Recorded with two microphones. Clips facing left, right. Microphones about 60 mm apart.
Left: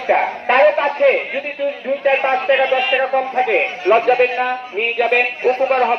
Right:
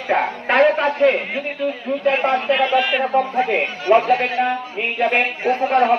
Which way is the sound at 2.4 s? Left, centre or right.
Left.